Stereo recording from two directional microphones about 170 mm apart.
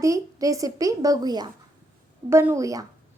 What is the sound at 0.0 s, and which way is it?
A woman's voice, 20° right (ahead or behind).